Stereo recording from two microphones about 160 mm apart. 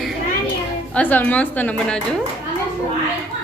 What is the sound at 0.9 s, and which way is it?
A woman's voice, 10° left (ahead or behind).